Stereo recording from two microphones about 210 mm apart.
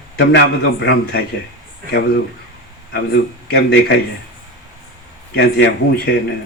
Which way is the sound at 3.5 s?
50° left (ahead or behind).